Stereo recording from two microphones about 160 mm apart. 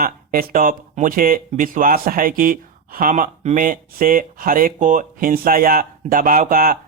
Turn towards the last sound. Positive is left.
turn(degrees=-60)  # may be behind; listen again after turning